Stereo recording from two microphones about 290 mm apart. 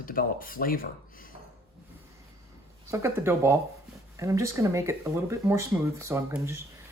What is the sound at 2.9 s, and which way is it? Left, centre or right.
Speech, centre.